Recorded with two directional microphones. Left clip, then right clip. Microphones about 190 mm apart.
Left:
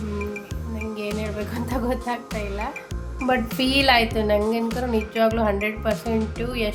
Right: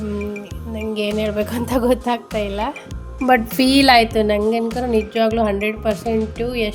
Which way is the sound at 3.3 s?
25° right (ahead or behind).